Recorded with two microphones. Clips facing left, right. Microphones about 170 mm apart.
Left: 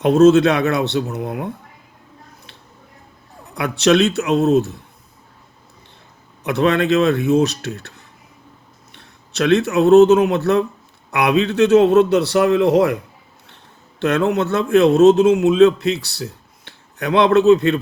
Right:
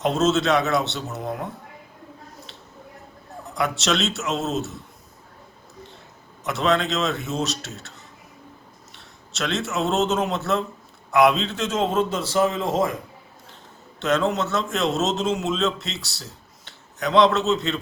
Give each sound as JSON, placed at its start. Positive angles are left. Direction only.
{"t": 0.0, "sound": "a man's voice", "side_deg": 60}
{"t": 3.6, "sound": "a man's voice", "side_deg": 60}
{"t": 6.4, "sound": "a man's voice", "side_deg": 60}
{"t": 14.0, "sound": "a man's voice", "side_deg": 60}